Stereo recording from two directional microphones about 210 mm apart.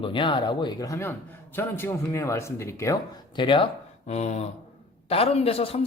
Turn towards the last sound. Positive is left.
turn(degrees=30)  # may be behind; listen again after turning